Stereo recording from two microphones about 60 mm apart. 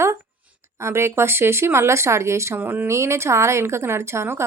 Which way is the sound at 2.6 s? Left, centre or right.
Right.